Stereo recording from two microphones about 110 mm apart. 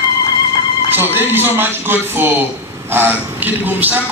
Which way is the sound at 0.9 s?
20° right (ahead or behind).